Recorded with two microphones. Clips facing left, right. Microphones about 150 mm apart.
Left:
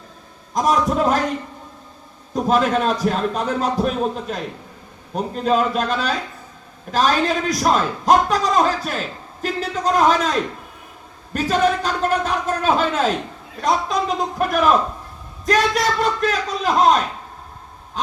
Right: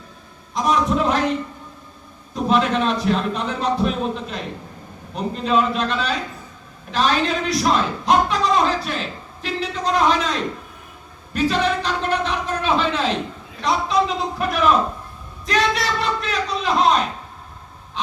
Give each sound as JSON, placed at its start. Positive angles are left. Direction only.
{"t": 0.5, "sound": "a sound", "side_deg": 45}
{"t": 2.3, "sound": "a man's voice", "side_deg": 45}
{"t": 18.0, "sound": "gasp", "side_deg": 45}